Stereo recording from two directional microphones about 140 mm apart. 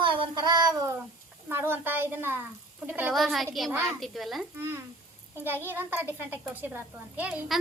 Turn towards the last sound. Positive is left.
turn(degrees=-10)  # may be behind; listen again after turning